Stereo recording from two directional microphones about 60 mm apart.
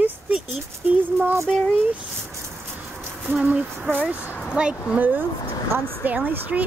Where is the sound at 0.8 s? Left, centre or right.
Right.